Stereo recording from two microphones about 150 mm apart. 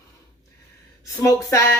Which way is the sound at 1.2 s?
20° left (ahead or behind).